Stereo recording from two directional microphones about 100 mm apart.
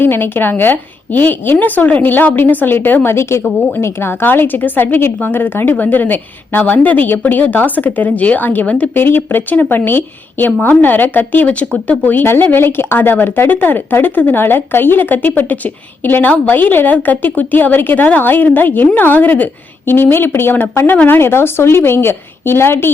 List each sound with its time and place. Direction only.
0.0 s a woman's voice: 20° left (ahead or behind)